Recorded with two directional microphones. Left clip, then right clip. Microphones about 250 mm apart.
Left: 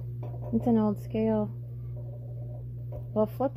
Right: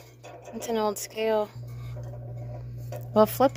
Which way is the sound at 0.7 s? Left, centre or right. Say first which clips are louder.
Right 2 dB; centre.